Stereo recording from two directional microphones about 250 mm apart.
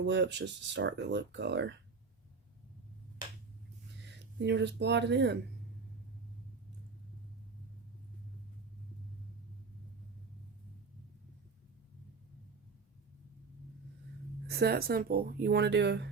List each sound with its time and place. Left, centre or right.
0.0 s speech: right
4.1 s speech: right
14.4 s speech: right